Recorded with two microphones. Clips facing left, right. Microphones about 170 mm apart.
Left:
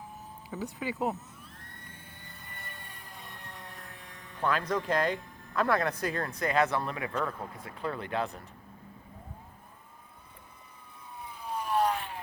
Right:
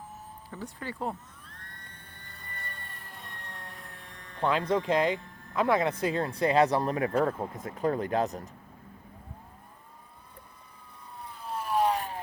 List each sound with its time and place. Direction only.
0.5 s speech: 5° left (ahead or behind)
1.5 s vehicle: 5° left (ahead or behind)
4.4 s speech: 25° right (ahead or behind); by 8.4 s 40° right (ahead or behind)
11.2 s vehicle: centre (ahead or behind)
11.9 s vehicle: 40° right (ahead or behind)